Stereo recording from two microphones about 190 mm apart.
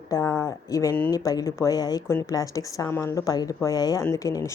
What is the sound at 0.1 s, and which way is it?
A woman's voice, 15° left (ahead or behind).